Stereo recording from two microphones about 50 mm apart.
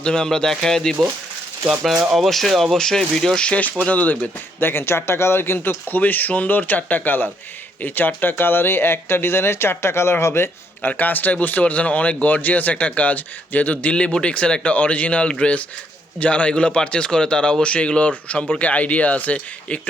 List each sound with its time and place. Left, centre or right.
0.0 s speech: centre
2.1 s speech: centre
2.7 s speech: centre; by 4.3 s left
4.6 s speech: left
10.9 s speech: left